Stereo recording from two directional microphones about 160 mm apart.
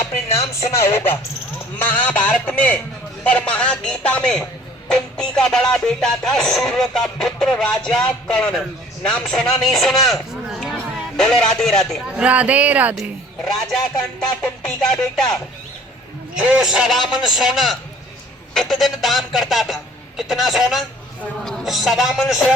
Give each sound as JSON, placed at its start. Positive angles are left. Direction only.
{"t": 0.3, "sound": "speech", "side_deg": 20}
{"t": 13.4, "sound": "speech", "side_deg": 5}
{"t": 16.4, "sound": "speech", "side_deg": -5}